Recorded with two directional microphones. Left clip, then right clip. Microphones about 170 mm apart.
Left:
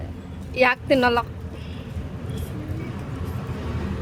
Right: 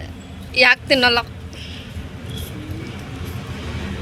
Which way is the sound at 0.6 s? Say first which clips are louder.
Right 5 dB; 15° left (ahead or behind).